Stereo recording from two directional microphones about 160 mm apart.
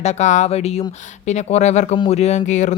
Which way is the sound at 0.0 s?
45° left (ahead or behind).